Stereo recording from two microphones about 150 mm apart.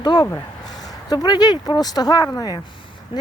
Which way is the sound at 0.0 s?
30° left (ahead or behind).